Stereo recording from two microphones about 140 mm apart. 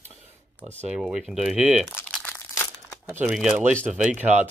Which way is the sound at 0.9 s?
5° right (ahead or behind).